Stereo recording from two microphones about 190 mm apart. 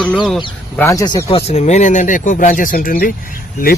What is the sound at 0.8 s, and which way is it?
Speech, 20° left (ahead or behind).